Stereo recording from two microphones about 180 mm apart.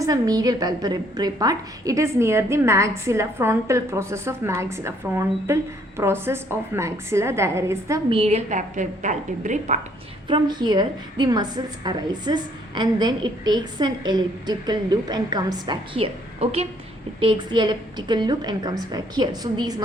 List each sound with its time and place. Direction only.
0.0 s a woman's voice: 20° right (ahead or behind)
8.1 s a woman's voice: 35° right (ahead or behind)
10.2 s a woman's voice: 25° right (ahead or behind)